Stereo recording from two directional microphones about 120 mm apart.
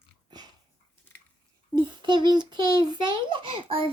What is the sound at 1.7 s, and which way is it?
A child's voice, 40° right (ahead or behind).